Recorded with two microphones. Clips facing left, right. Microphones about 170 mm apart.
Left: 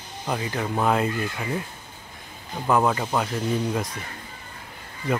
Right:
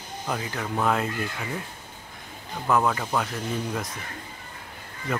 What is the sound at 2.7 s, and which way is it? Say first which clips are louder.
Speech: left 2 dB; 15° left (ahead or behind).